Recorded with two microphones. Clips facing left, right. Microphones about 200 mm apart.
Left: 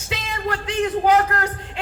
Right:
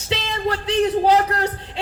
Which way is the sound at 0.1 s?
30° right (ahead or behind).